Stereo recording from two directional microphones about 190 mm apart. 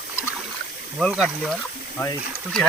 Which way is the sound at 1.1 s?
Centre (ahead or behind).